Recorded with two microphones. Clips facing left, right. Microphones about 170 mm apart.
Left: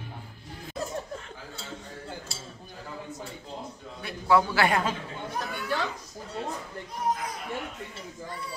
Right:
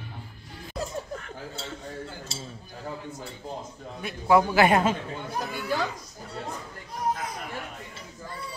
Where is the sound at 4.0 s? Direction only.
15° right (ahead or behind).